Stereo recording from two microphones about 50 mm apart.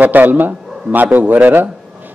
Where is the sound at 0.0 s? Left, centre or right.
Right.